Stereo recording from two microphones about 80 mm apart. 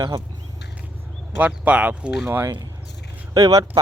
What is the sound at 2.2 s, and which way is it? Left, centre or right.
Speech, right.